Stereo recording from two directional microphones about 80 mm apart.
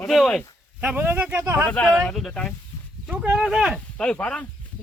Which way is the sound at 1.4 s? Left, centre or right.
Right.